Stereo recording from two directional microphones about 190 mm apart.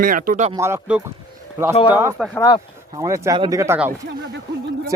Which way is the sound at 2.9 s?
15° right (ahead or behind).